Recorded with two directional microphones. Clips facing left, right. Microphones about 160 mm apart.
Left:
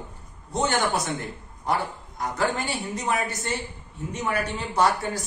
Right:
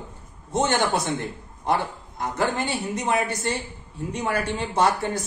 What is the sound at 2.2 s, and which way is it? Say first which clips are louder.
A woman's voice: right 1 dB; 25° right (ahead or behind).